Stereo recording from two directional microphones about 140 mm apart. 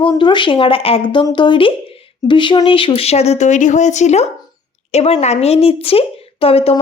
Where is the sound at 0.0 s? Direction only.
35° left (ahead or behind).